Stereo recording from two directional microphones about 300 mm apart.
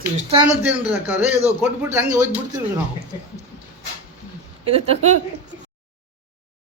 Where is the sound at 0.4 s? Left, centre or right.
Centre.